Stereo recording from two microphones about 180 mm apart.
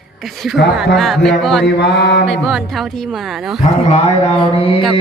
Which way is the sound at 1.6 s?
70° left (ahead or behind).